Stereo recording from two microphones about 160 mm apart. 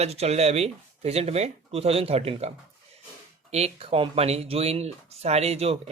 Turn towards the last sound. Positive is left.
turn(degrees=-40)  # may be behind; listen again after turning